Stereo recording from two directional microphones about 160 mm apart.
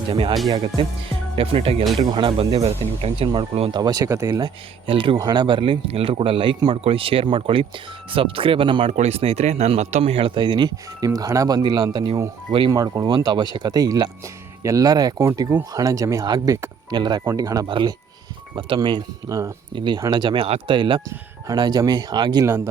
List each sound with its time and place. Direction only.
0.1 s speech: 35° right (ahead or behind)
1.4 s speech: 35° right (ahead or behind)
3.8 s speech: 25° right (ahead or behind)